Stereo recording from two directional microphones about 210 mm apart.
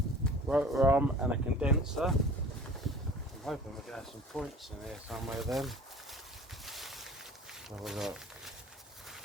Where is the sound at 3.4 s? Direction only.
Centre (ahead or behind).